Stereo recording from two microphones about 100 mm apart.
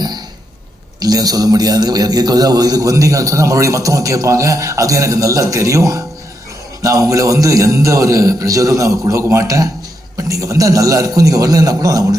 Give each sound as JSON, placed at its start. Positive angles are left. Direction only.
{"t": 0.9, "sound": "a man's voice", "side_deg": -40}